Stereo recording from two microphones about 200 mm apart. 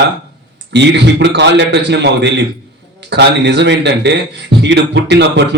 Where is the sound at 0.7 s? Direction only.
60° right (ahead or behind).